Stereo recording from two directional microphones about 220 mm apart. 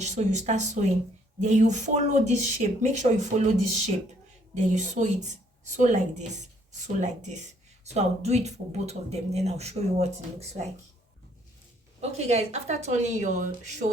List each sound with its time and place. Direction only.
0.0 s speech: 30° right (ahead or behind)
4.5 s speech: 35° right (ahead or behind)
11.9 s speech: 30° right (ahead or behind)